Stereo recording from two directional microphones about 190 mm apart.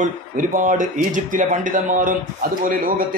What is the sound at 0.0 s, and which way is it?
A man's voice, 40° right (ahead or behind).